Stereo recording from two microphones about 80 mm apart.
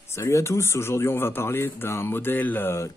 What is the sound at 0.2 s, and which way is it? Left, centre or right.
Speech, left.